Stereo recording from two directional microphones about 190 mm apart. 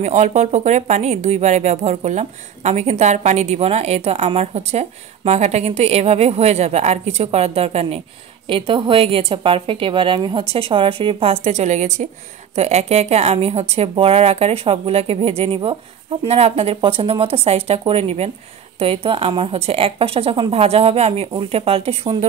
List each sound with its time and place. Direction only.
0.0 s a woman's voice: 35° right (ahead or behind)